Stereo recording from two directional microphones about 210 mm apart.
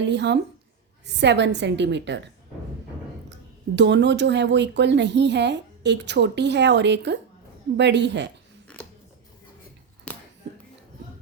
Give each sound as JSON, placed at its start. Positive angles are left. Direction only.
{"t": 0.0, "sound": "a woman's voice", "side_deg": -55}
{"t": 3.8, "sound": "a woman's voice", "side_deg": -55}
{"t": 10.1, "sound": "a sound", "side_deg": 5}